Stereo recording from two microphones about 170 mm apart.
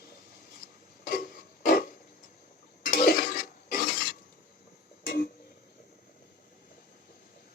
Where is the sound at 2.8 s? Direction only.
60° left (ahead or behind).